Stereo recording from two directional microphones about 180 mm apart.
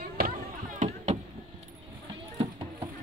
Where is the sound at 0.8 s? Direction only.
45° right (ahead or behind).